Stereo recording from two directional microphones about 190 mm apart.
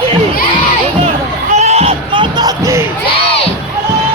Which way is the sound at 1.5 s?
35° right (ahead or behind).